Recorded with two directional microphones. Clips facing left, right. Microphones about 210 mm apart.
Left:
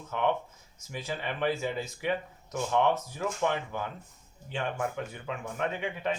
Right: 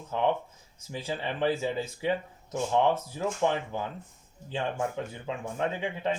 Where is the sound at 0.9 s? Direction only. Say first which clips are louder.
Right 2 dB; 30° right (ahead or behind).